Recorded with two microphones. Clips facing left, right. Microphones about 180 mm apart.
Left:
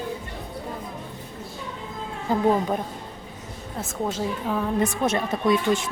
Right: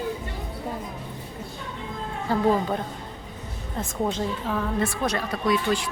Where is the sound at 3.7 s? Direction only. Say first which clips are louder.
Right 1 dB; 5° left (ahead or behind).